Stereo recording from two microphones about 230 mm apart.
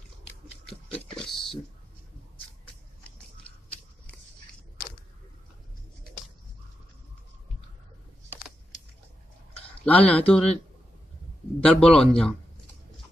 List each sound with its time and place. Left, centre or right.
0.9 s a sound: centre
9.8 s a man's voice: centre
11.6 s a man's voice: centre